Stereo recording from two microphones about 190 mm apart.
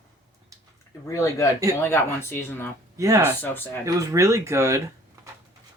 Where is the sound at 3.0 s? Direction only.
15° right (ahead or behind).